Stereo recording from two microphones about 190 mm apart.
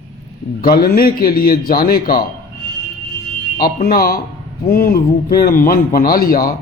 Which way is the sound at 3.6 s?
50° left (ahead or behind).